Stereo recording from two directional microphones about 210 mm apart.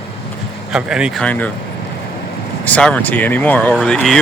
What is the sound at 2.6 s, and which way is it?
Speech, 5° left (ahead or behind).